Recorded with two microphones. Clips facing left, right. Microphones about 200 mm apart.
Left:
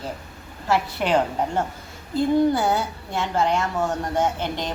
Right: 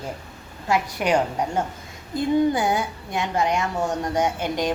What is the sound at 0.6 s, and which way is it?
Speech, 15° right (ahead or behind).